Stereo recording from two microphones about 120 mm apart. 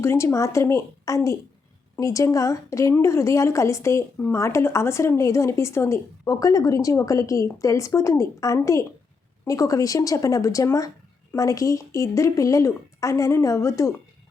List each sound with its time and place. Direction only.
0.0 s a woman's voice: 20° left (ahead or behind)